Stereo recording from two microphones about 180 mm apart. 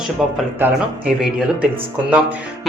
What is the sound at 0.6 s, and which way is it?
Speech, 15° right (ahead or behind).